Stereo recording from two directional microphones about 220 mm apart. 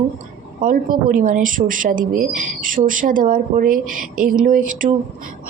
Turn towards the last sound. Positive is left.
turn(degrees=-35)  # may be behind; listen again after turning